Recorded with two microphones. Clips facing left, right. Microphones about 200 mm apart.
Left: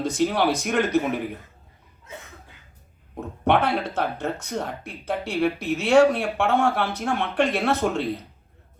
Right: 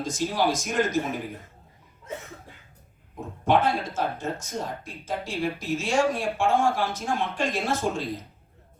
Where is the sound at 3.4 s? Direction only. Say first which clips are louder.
Left 1 dB; 65° left (ahead or behind).